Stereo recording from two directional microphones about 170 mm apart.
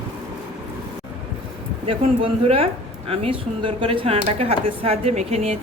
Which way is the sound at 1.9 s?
30° right (ahead or behind).